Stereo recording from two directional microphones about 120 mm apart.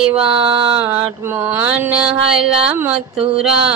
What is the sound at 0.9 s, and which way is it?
Mantra, 20° right (ahead or behind).